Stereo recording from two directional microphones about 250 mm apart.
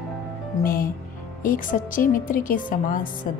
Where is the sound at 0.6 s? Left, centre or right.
Left.